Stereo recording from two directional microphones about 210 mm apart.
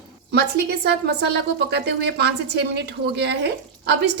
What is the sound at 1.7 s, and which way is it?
A woman's voice, 50° right (ahead or behind).